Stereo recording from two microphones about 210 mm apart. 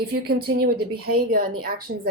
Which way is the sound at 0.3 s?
45° right (ahead or behind).